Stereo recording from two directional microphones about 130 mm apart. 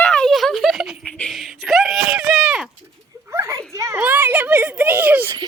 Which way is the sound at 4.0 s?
10° right (ahead or behind).